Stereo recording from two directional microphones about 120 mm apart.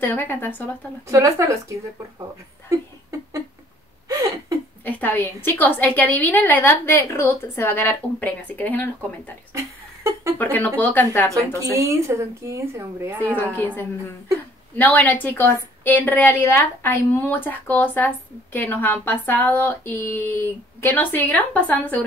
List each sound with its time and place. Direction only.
0.0 s speech: 15° left (ahead or behind)
1.0 s speech: 25° right (ahead or behind)
2.7 s a sound: 25° right (ahead or behind)
4.8 s a woman's voice: 15° left (ahead or behind)
10.4 s a woman's voice: 15° left (ahead or behind)
11.3 s speech: 25° right (ahead or behind)
13.2 s a woman's voice: 15° left (ahead or behind)